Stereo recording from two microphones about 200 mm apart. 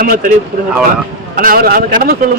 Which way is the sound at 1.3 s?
45° right (ahead or behind).